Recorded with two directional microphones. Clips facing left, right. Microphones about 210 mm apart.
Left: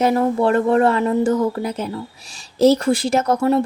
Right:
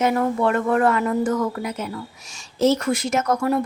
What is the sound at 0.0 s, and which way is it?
Speech, 30° left (ahead or behind).